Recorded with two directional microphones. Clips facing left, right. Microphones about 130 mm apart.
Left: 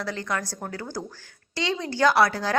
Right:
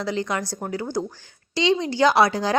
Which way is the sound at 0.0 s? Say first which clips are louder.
Right 4 dB; 15° right (ahead or behind).